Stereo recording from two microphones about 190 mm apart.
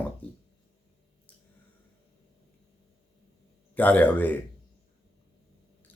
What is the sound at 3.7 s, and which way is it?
Speech, 10° left (ahead or behind).